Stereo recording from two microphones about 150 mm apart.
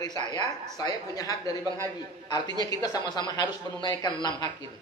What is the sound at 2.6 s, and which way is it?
A man's voice, 25° left (ahead or behind).